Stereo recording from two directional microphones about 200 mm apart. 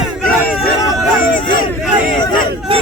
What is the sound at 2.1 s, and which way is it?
Speech, 20° left (ahead or behind).